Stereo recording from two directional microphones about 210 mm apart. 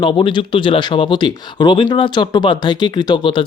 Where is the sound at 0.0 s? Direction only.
25° left (ahead or behind).